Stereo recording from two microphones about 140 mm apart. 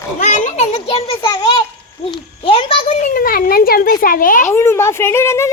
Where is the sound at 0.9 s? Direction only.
40° left (ahead or behind).